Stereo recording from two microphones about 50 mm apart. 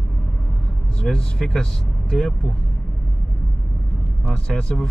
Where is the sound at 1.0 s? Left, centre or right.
Centre.